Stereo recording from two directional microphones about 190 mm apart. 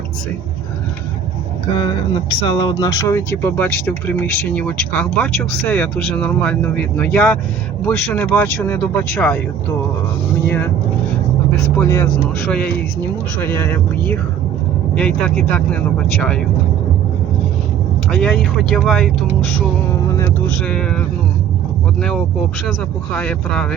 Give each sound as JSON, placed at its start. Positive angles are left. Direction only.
{"t": 1.8, "sound": "speech", "side_deg": 25}
{"t": 11.8, "sound": "speech", "side_deg": 15}
{"t": 18.1, "sound": "speech", "side_deg": 5}
{"t": 20.1, "sound": "speech", "side_deg": 15}
{"t": 20.7, "sound": "speech", "side_deg": 5}
{"t": 23.1, "sound": "speech", "side_deg": 5}